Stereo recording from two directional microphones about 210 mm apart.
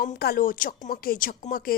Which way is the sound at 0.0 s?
45° left (ahead or behind).